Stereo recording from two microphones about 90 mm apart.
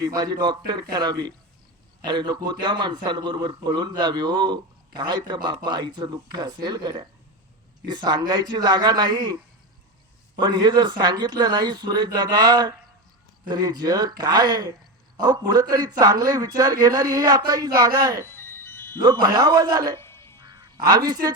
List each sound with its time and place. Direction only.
0.0 s a man's voice: 45° right (ahead or behind)
18.3 s music: 25° left (ahead or behind)
18.9 s a man's voice: 45° right (ahead or behind)
20.0 s crow: 30° left (ahead or behind)
20.4 s a sound: 50° right (ahead or behind)